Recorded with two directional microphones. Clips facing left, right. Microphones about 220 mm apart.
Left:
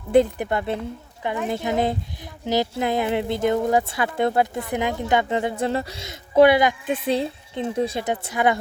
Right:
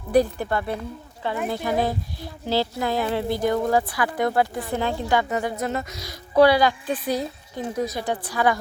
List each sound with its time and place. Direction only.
0.1 s speech: 20° left (ahead or behind)